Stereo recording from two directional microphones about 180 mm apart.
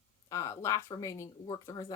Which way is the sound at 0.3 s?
15° left (ahead or behind).